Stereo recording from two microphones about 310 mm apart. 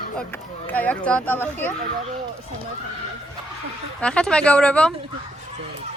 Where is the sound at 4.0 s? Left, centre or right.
Centre.